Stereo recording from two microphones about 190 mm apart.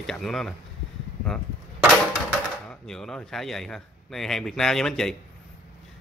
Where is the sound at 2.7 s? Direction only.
5° left (ahead or behind).